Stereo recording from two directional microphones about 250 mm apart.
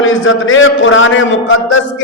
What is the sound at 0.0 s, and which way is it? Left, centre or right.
A man's voice, left.